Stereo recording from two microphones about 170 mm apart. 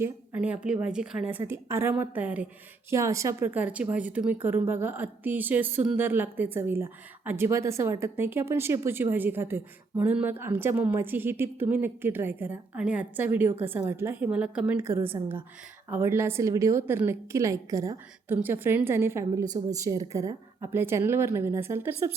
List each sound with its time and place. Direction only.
0.0 s a woman's voice: 10° right (ahead or behind)